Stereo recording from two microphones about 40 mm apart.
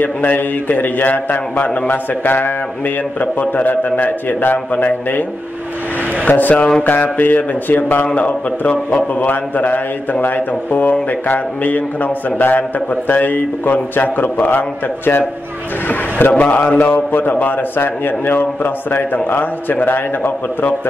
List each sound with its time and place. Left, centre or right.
0.0 s a man's voice: left
3.2 s a man's voice: left
6.2 s a man's voice: left
8.1 s a man's voice: left
15.9 s a man's voice: left